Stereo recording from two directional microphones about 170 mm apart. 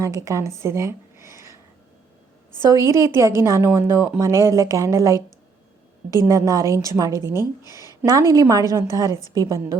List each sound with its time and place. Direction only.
0.0 s a woman's voice: 20° right (ahead or behind)
0.6 s a sound: 15° right (ahead or behind)
2.6 s a woman's voice: 20° right (ahead or behind)
6.2 s a woman's voice: 20° right (ahead or behind)